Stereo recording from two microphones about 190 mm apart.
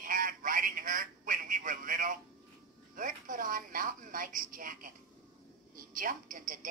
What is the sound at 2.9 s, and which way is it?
A woman's voice, 45° right (ahead or behind).